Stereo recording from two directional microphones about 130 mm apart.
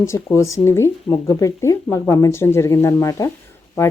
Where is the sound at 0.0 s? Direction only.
20° left (ahead or behind).